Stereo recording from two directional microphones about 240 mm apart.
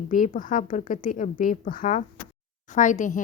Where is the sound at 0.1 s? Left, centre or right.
Left.